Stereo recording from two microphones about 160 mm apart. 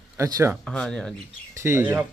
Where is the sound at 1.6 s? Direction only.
15° right (ahead or behind).